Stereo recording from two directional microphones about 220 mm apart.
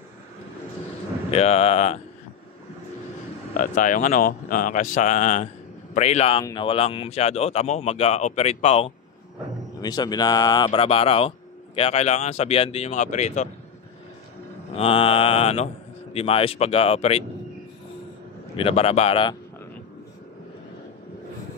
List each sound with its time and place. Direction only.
1.3 s speech: 30° left (ahead or behind)
3.5 s speech: 35° left (ahead or behind)
14.7 s speech: 25° left (ahead or behind)
18.6 s speech: 25° left (ahead or behind)